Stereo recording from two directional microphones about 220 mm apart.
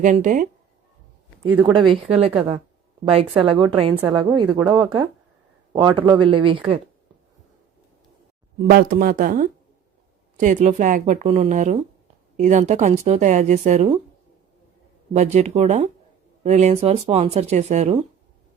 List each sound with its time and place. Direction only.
0.0 s a woman's voice: 35° right (ahead or behind)
1.5 s speech: 10° right (ahead or behind)
1.7 s speech: 25° right (ahead or behind)
8.7 s a woman's voice: 40° right (ahead or behind)
15.1 s a woman's voice: 30° right (ahead or behind)